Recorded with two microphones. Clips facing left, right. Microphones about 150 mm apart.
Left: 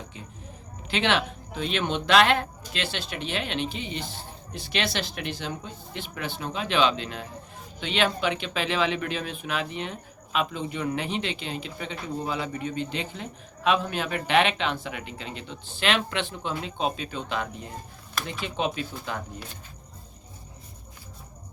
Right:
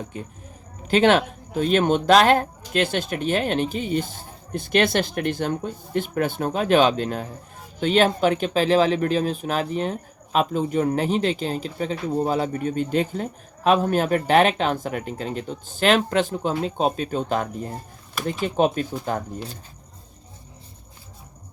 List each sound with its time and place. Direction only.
0.9 s speech: 45° right (ahead or behind)